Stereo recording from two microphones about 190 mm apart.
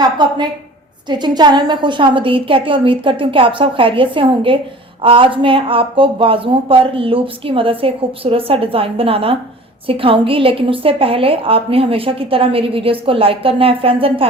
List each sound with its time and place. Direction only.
0.0 s a woman's voice: 20° right (ahead or behind)